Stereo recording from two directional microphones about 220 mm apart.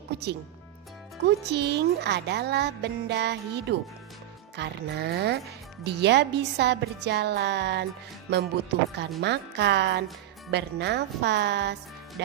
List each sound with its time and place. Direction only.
1.5 s speech: 50° right (ahead or behind)